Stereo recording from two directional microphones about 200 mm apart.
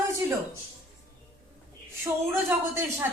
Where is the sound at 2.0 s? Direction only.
10° right (ahead or behind).